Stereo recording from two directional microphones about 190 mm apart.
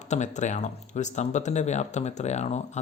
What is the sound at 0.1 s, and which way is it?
Speech, 40° left (ahead or behind).